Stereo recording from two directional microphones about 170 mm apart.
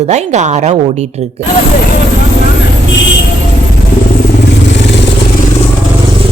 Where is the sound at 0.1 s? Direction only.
45° right (ahead or behind).